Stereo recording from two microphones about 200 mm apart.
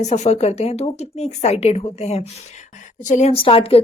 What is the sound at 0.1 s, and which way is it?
Speech, 35° left (ahead or behind).